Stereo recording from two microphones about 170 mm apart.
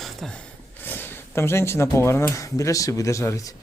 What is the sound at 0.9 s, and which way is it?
A man's voice, 10° left (ahead or behind).